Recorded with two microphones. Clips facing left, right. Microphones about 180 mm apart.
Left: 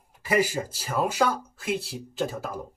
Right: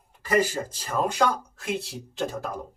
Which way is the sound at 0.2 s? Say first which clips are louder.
Right 1 dB; 10° left (ahead or behind).